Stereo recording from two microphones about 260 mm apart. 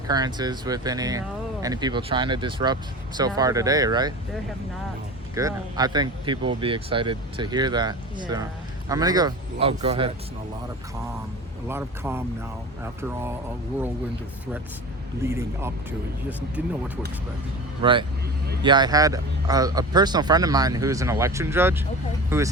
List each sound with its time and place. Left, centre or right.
0.1 s speech: centre
5.3 s speech: centre
11.7 s speech: centre
15.2 s speech: centre
18.6 s speech: centre